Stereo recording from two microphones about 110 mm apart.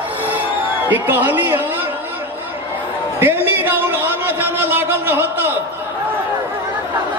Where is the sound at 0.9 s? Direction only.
20° right (ahead or behind).